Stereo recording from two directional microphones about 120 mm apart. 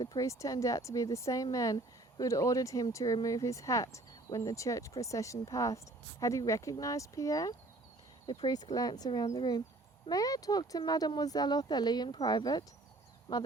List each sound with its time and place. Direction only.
0.0 s speech: 30° left (ahead or behind)